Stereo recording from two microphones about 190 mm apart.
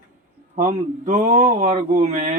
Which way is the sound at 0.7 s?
40° right (ahead or behind).